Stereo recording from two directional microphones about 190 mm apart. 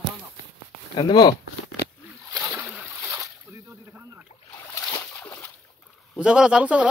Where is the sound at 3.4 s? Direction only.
15° right (ahead or behind).